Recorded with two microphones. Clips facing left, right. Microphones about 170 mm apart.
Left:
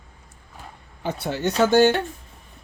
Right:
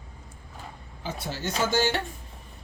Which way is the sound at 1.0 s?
60° left (ahead or behind).